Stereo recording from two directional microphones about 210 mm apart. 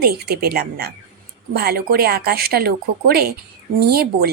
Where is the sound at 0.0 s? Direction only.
45° right (ahead or behind).